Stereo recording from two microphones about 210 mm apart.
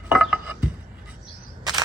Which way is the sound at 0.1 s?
5° right (ahead or behind).